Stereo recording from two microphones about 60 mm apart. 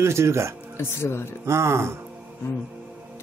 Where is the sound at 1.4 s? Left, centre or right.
Right.